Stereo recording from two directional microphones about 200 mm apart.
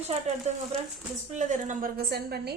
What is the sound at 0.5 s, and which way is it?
A woman's voice, 35° right (ahead or behind).